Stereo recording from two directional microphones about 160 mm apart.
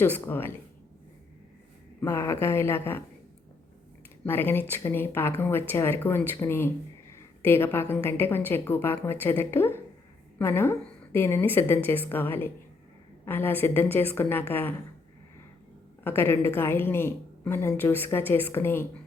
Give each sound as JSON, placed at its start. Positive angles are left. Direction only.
{"t": 0.0, "sound": "speech", "side_deg": 15}
{"t": 2.0, "sound": "speech", "side_deg": 15}
{"t": 4.3, "sound": "speech", "side_deg": 15}
{"t": 16.0, "sound": "speech", "side_deg": 15}